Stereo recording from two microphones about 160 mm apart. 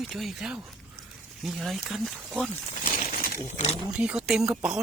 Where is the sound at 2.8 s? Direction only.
65° left (ahead or behind).